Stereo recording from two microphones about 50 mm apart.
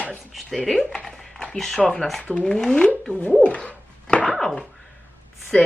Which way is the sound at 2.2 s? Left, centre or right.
Left.